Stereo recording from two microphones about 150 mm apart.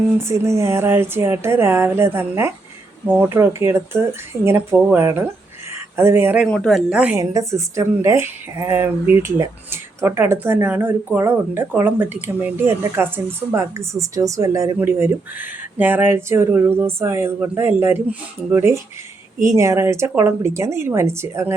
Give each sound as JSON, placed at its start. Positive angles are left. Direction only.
{"t": 0.2, "sound": "a woman's voice", "side_deg": -20}
{"t": 6.4, "sound": "a woman's voice", "side_deg": 5}
{"t": 7.2, "sound": "a woman's voice", "side_deg": -20}